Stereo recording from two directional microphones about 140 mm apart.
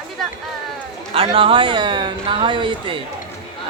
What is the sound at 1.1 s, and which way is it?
Speech, 40° right (ahead or behind).